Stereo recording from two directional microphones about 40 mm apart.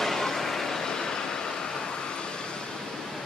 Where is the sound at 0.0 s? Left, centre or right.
Centre.